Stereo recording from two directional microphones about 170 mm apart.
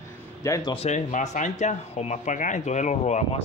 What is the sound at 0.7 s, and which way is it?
Speech, 40° left (ahead or behind).